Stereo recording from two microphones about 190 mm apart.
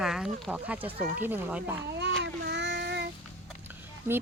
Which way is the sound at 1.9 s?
65° right (ahead or behind).